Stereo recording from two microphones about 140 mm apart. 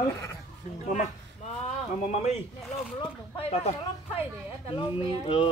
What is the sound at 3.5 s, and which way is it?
Speech, 45° left (ahead or behind).